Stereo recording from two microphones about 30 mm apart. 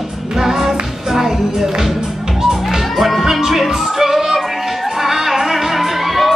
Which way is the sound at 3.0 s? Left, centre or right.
Centre.